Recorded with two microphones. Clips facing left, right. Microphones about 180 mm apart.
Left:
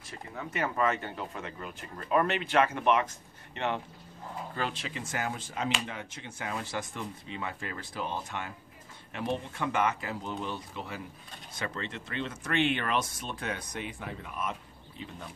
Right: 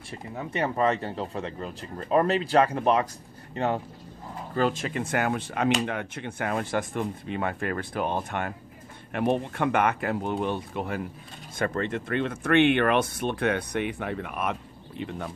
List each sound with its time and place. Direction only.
0.4 s speech: 30° right (ahead or behind); by 15.3 s 65° right (ahead or behind)